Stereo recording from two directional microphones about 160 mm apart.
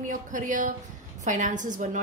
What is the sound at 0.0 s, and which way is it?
A woman's voice, 55° right (ahead or behind).